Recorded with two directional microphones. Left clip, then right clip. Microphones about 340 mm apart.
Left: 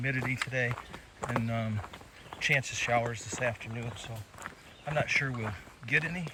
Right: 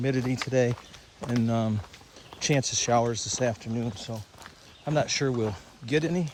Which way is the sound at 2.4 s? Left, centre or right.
Right.